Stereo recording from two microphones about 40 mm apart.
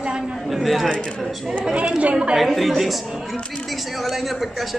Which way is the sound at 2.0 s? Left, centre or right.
Right.